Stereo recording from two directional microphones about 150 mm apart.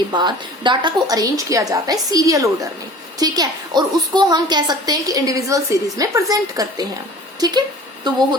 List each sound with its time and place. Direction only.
0.1 s a woman's voice: 30° right (ahead or behind)